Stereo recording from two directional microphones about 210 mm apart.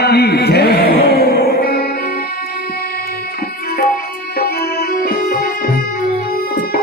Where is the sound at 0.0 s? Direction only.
50° left (ahead or behind).